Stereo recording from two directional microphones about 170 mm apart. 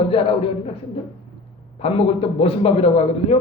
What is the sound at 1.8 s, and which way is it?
Speech, 35° left (ahead or behind).